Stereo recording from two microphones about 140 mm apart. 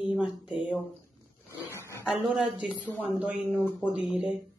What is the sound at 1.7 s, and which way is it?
Dog, 20° left (ahead or behind).